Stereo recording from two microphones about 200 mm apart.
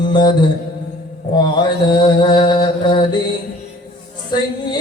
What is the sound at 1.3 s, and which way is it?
Mantra, 20° left (ahead or behind).